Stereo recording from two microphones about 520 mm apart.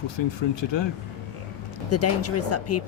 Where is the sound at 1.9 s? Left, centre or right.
Left.